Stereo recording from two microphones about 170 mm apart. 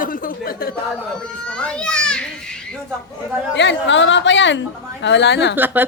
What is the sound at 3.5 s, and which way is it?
A woman's voice, 90° left.